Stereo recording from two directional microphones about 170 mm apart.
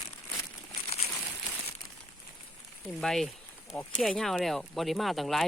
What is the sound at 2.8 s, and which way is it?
Speech, centre (ahead or behind).